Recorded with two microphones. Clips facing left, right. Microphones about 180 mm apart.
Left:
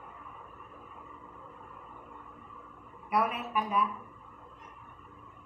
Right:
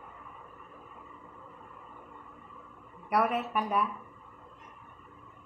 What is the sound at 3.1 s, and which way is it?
Speech, 70° right (ahead or behind).